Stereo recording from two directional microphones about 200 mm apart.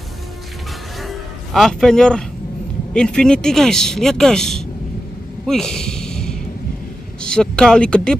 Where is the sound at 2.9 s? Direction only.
5° left (ahead or behind).